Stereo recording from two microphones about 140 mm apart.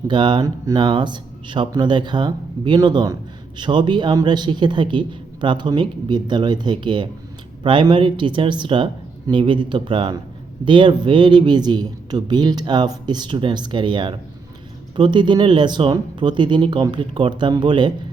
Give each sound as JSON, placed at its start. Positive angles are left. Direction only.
{"t": 0.1, "sound": "speech", "side_deg": -35}